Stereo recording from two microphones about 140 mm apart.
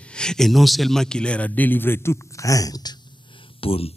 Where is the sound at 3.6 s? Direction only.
45° left (ahead or behind).